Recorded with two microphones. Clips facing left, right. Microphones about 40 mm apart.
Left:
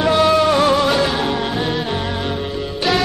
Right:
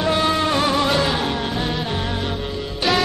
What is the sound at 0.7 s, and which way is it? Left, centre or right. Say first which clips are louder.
Music: left 3 dB; centre.